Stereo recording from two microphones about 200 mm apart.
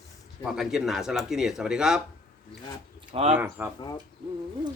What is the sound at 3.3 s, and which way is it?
Speech, 10° right (ahead or behind).